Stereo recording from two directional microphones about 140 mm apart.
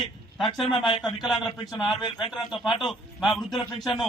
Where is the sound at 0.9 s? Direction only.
30° left (ahead or behind).